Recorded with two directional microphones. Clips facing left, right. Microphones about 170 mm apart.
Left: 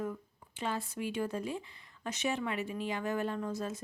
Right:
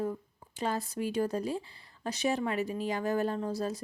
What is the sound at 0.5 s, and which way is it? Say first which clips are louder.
Speech: right 4 dB; 40° right (ahead or behind).